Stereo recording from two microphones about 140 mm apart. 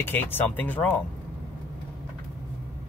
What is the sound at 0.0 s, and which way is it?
Speech, 15° left (ahead or behind).